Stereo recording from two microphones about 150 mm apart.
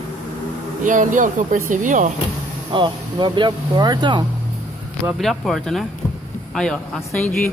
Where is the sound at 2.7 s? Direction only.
30° right (ahead or behind).